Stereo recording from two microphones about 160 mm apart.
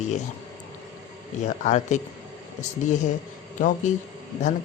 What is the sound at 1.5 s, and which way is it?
Speech, 50° left (ahead or behind).